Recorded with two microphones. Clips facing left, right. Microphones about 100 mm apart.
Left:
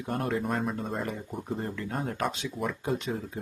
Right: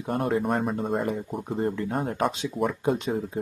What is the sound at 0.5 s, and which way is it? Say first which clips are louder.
Speech: right 5 dB; 5° right (ahead or behind).